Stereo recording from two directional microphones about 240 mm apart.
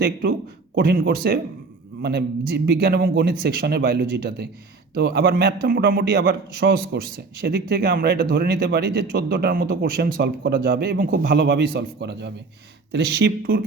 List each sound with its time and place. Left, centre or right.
0.0 s speech: right